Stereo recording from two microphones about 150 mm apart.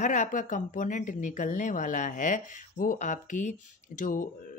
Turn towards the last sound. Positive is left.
turn(degrees=60)  # may be behind; listen again after turning